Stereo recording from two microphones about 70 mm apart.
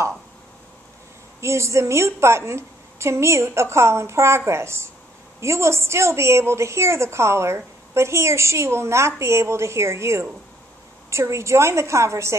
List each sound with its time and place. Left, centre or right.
1.4 s a woman's voice: right